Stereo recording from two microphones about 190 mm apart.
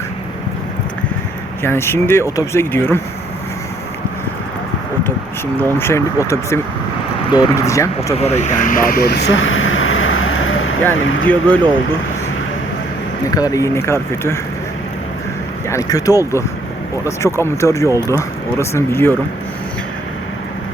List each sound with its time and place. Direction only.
1.6 s speech: 10° left (ahead or behind)
5.8 s speech: 15° left (ahead or behind)
8.2 s vehicle: 40° left (ahead or behind); by 10.8 s 90° left
10.9 s speech: 90° left
11.3 s speech: 10° left (ahead or behind)
13.3 s speech: 20° left (ahead or behind)
15.7 s speech: 20° left (ahead or behind)